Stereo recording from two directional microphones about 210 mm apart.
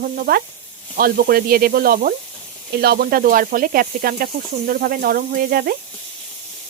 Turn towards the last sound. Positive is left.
turn(degrees=-45)  # may be behind; listen again after turning